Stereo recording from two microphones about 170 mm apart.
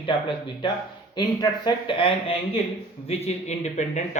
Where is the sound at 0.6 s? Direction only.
30° left (ahead or behind).